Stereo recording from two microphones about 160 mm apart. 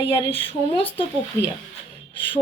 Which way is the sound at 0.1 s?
35° left (ahead or behind).